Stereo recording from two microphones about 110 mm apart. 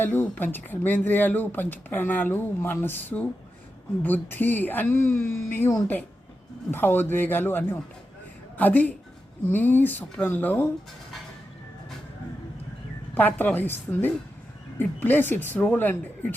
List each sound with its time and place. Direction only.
0.0 s a man's voice: 15° left (ahead or behind)
13.1 s speech: 15° left (ahead or behind)